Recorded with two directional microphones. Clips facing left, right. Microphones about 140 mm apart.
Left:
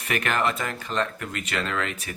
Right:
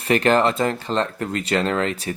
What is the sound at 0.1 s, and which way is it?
Speech, 30° right (ahead or behind).